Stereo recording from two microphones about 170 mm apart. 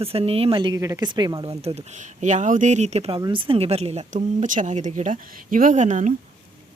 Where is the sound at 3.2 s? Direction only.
25° right (ahead or behind); by 6.1 s 45° right (ahead or behind).